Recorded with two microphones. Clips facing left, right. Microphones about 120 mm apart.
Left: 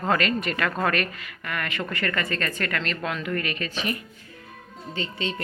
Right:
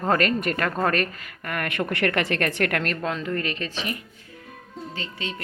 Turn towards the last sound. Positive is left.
turn(degrees=-5)  # may be behind; listen again after turning